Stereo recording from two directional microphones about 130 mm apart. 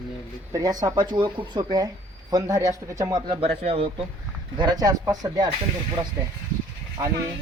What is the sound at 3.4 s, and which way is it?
Speech, 50° right (ahead or behind).